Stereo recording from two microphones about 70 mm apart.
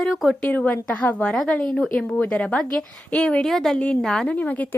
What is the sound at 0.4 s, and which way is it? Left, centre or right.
A woman's voice, left.